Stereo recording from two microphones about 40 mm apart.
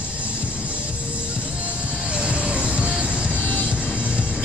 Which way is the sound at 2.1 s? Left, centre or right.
Right.